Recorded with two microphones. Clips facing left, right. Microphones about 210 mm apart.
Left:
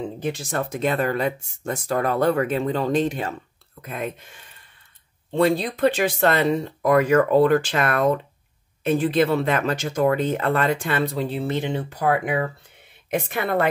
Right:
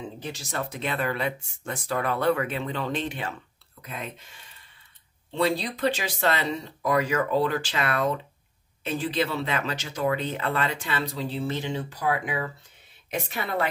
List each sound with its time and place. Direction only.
0.2 s speech: 55° left (ahead or behind)
3.8 s speech: 50° left (ahead or behind)
5.3 s speech: 50° left (ahead or behind)